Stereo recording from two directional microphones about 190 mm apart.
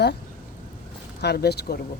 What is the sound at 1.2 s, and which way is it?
Speech, 60° left (ahead or behind).